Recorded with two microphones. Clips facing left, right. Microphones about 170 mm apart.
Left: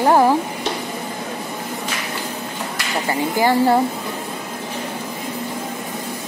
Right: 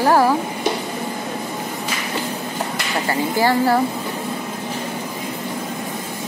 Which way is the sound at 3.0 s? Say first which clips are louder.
Left 1 dB; 15° left (ahead or behind).